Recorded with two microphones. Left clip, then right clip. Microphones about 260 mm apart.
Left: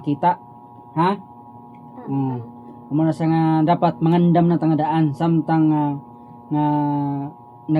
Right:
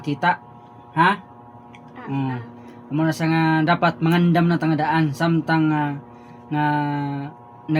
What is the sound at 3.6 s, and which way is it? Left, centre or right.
Speech, centre.